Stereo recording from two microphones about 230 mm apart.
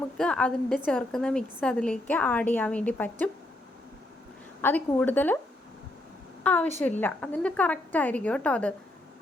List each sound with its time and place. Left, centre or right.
0.2 s a woman's voice: centre
4.6 s a woman's voice: centre
6.4 s a woman's voice: centre